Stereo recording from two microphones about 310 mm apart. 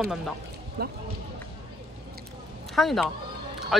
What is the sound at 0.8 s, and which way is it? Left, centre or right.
Speech, right.